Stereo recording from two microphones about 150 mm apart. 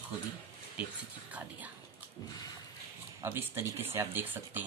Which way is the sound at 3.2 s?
15° right (ahead or behind).